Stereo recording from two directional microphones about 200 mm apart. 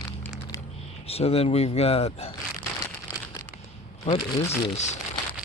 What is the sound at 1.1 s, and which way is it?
Speech, 30° left (ahead or behind).